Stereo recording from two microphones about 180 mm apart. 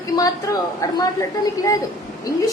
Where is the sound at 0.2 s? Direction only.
20° left (ahead or behind).